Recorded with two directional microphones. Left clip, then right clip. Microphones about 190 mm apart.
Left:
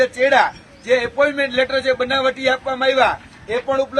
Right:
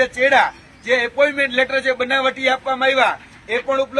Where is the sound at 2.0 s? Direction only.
5° right (ahead or behind).